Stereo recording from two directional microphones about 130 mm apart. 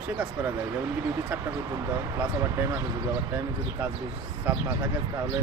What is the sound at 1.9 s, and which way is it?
Speech, 20° right (ahead or behind).